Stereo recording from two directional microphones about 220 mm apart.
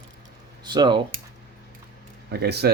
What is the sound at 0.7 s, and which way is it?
Speech, 20° right (ahead or behind).